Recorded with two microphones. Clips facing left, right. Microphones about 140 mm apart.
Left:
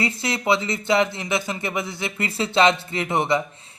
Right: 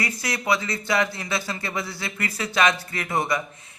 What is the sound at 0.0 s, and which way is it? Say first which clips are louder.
Speech: left 4 dB; 25° left (ahead or behind).